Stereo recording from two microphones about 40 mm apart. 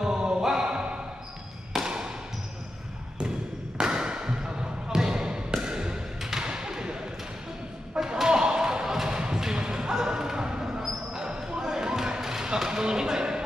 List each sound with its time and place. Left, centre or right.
0.0 s music: centre
0.7 s basketball bounce: right
1.7 s a sound: centre
3.8 s basketball bounce: right
8.0 s basketball bounce: centre